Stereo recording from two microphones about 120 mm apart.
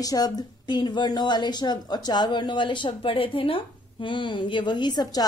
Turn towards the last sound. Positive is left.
turn(degrees=35)  # may be behind; listen again after turning